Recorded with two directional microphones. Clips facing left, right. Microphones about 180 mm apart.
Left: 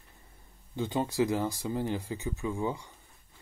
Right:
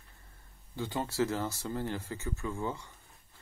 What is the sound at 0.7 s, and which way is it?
Speech, 20° left (ahead or behind).